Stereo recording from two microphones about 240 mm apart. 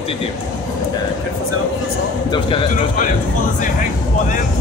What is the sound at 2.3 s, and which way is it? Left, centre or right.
Speech, left.